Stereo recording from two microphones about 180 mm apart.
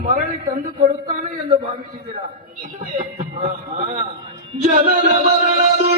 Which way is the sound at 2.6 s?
45° right (ahead or behind).